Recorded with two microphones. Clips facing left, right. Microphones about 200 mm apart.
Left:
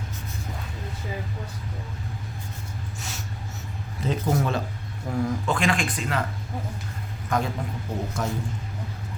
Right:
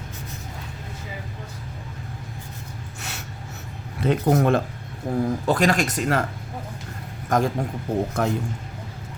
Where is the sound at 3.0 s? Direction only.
65° right (ahead or behind).